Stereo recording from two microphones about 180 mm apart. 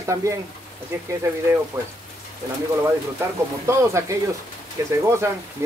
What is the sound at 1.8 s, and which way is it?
Speech, 15° right (ahead or behind).